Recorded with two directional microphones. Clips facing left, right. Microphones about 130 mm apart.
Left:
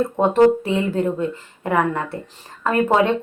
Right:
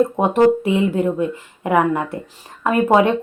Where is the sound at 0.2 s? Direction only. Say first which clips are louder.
Left 4 dB; 15° right (ahead or behind).